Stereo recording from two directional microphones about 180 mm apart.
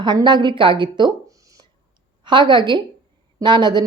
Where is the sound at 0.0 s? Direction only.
25° right (ahead or behind).